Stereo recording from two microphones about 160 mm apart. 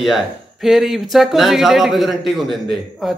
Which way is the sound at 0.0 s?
Centre (ahead or behind).